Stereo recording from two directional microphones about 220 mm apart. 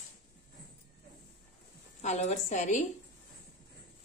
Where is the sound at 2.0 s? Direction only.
30° left (ahead or behind).